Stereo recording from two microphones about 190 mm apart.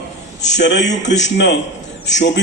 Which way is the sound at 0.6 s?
65° left (ahead or behind).